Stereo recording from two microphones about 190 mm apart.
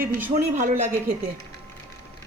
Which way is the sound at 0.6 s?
40° right (ahead or behind).